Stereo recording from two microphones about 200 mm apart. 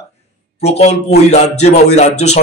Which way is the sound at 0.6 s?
30° left (ahead or behind).